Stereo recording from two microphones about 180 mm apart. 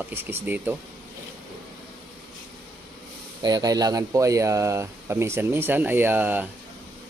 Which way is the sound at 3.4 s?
20° right (ahead or behind).